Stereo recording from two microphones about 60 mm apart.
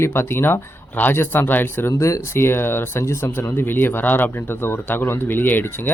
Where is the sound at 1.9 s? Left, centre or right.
Left.